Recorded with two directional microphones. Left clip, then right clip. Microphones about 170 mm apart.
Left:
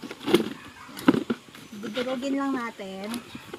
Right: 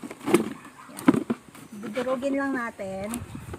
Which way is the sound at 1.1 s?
20° right (ahead or behind).